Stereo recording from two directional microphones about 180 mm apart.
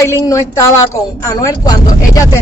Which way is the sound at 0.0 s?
15° left (ahead or behind).